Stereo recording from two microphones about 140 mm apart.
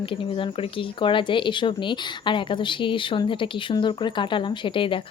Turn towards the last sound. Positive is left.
turn(degrees=35)  # may be behind; listen again after turning